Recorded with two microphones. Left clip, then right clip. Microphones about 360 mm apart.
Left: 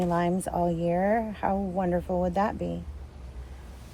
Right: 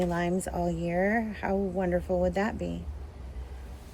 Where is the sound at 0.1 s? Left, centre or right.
Centre.